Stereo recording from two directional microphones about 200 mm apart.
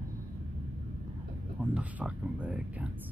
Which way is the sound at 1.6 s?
5° right (ahead or behind).